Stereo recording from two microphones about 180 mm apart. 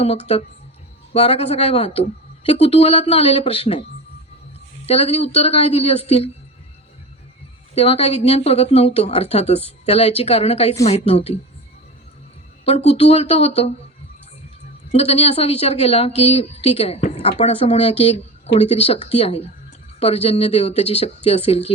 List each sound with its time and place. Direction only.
0.0 s speech: 35° left (ahead or behind)
4.9 s speech: 35° left (ahead or behind)
7.8 s speech: 35° left (ahead or behind)
12.6 s speech: 35° left (ahead or behind)
14.9 s speech: 35° left (ahead or behind)